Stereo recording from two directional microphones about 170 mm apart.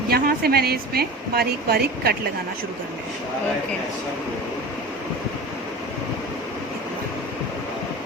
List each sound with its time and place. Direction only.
0.1 s a woman's voice: 65° right (ahead or behind)